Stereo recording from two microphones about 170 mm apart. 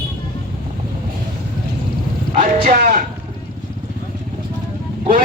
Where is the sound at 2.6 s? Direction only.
55° right (ahead or behind).